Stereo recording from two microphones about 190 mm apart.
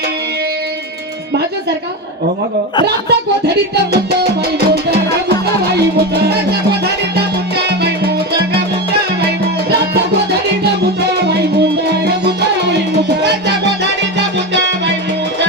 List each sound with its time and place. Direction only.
2.8 s music: 60° right (ahead or behind)
6.2 s music: 60° right (ahead or behind)
11.1 s music: 60° right (ahead or behind)